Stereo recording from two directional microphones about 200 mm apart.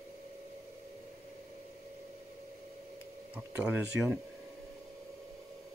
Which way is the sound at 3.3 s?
5° right (ahead or behind).